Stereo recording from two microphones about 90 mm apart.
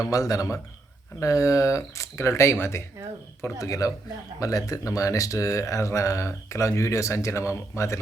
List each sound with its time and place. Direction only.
0.0 s speech: 40° left (ahead or behind)